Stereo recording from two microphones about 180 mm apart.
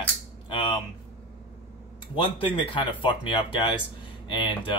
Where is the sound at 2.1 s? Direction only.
30° left (ahead or behind).